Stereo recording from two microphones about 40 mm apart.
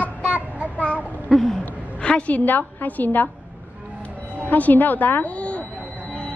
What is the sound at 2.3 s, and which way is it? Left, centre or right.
A woman's voice, left.